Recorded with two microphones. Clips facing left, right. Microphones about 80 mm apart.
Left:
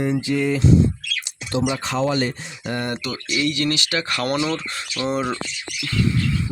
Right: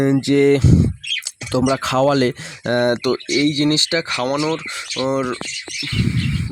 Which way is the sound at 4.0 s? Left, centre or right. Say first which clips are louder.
Right 3 dB; centre.